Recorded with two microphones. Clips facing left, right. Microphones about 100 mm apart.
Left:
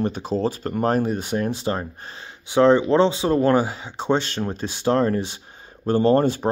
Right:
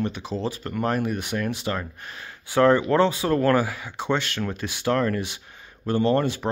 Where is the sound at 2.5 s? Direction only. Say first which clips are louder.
Left 3 dB; 20° left (ahead or behind).